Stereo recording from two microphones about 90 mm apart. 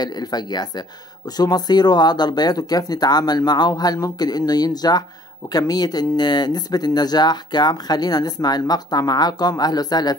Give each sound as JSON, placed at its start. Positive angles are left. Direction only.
{"t": 0.0, "sound": "speech", "side_deg": 50}